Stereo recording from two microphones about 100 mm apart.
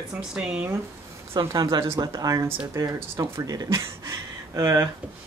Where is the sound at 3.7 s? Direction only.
30° right (ahead or behind).